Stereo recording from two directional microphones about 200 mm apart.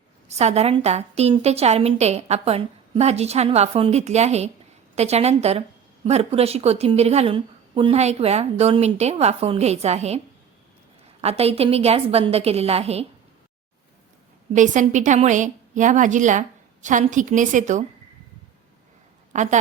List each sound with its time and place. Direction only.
0.3 s a woman's voice: 35° right (ahead or behind)
11.2 s a woman's voice: 30° right (ahead or behind)
14.5 s a woman's voice: 40° right (ahead or behind)
19.3 s a woman's voice: 35° right (ahead or behind)